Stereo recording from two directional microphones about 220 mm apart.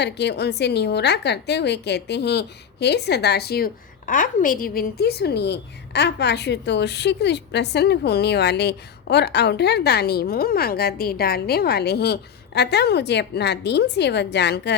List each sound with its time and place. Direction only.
0.0 s a woman's voice: 50° left (ahead or behind)